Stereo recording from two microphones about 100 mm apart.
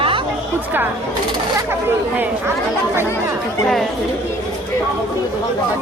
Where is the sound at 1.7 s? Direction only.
20° right (ahead or behind).